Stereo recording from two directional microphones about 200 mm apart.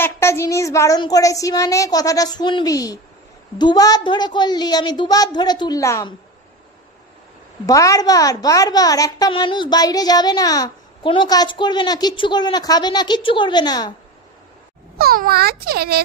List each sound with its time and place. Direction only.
0.0 s a woman's voice: 15° left (ahead or behind)
7.6 s a woman's voice: 15° left (ahead or behind)
15.0 s a child's voice: 50° right (ahead or behind)